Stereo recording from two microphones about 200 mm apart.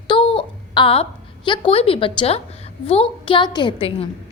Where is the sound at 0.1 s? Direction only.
25° left (ahead or behind).